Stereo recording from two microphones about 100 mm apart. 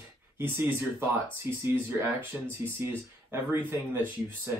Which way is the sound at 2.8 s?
25° right (ahead or behind).